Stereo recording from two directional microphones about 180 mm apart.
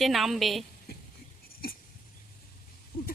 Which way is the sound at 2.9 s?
55° left (ahead or behind).